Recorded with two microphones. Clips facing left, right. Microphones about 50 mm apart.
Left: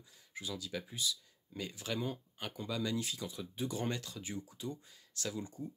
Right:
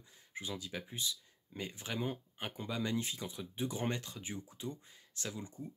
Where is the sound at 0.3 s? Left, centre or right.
Right.